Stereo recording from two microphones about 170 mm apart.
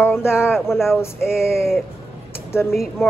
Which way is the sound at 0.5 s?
Centre (ahead or behind).